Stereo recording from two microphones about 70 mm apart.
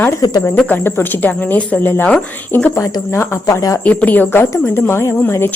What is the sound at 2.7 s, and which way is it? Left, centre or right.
Speech, left.